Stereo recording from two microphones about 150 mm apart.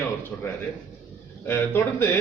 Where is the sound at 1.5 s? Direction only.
15° left (ahead or behind).